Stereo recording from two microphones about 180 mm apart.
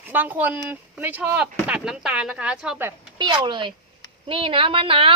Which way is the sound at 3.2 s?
25° right (ahead or behind).